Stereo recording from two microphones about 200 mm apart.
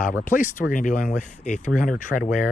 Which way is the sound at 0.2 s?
40° left (ahead or behind).